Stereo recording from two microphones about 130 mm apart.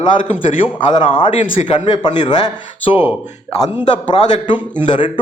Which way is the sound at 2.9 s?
50° left (ahead or behind).